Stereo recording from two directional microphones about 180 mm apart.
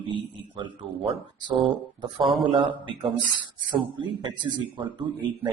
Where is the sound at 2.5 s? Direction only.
30° right (ahead or behind).